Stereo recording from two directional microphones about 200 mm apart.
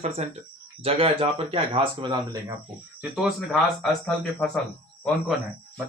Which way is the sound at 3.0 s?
Centre (ahead or behind).